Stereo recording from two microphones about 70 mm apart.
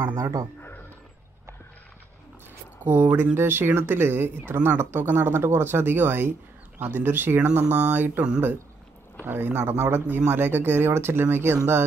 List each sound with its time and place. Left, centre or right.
0.0 s speech: right
2.8 s speech: right
9.2 s speech: right